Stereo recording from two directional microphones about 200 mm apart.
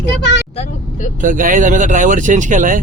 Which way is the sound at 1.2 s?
40° right (ahead or behind).